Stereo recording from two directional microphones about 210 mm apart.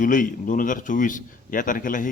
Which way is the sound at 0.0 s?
40° left (ahead or behind).